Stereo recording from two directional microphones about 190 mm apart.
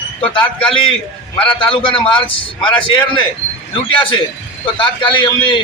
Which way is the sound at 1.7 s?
25° left (ahead or behind).